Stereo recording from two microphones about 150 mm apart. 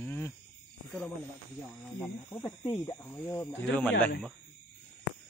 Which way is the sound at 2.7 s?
15° left (ahead or behind).